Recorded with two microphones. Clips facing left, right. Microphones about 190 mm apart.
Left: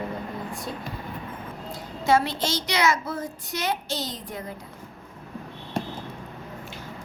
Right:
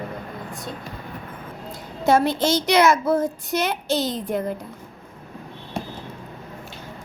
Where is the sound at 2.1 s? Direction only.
50° right (ahead or behind).